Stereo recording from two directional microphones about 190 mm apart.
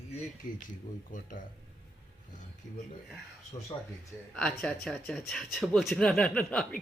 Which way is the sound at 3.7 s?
25° left (ahead or behind).